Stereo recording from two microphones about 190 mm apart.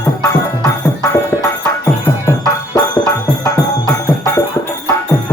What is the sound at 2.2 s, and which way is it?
Music, 15° left (ahead or behind).